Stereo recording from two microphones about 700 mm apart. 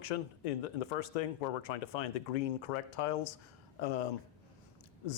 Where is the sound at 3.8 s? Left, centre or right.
Left.